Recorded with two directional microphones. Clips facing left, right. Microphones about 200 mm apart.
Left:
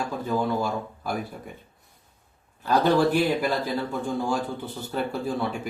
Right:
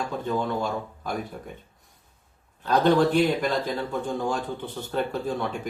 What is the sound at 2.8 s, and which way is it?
Speech, 5° left (ahead or behind).